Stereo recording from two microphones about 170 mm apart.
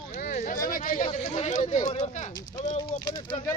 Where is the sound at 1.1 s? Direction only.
40° left (ahead or behind).